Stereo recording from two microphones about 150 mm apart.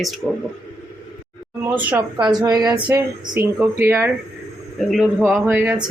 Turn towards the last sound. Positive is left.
turn(degrees=-10)  # may be behind; listen again after turning